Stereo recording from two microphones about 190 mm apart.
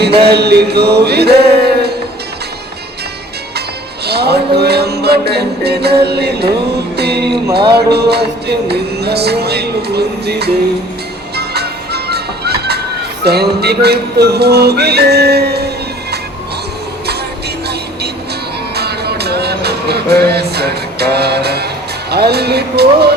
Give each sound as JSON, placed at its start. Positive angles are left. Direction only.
{"t": 0.3, "sound": "music", "side_deg": -60}
{"t": 4.0, "sound": "music", "side_deg": -60}
{"t": 18.7, "sound": "music", "side_deg": -60}